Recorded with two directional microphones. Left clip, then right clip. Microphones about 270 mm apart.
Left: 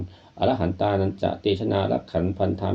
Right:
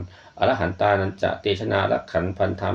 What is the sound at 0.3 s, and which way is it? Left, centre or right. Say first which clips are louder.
Speech: right 2 dB; centre.